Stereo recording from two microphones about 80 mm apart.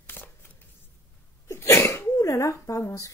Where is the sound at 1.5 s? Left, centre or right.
Left.